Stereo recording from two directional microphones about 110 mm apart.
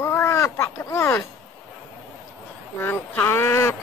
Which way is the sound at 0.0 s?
25° left (ahead or behind).